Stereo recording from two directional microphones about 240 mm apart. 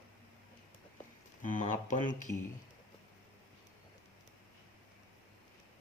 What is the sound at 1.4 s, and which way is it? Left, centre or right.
Speech, left.